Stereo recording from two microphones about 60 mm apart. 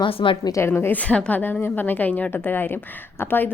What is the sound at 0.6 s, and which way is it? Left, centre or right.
Speech, left.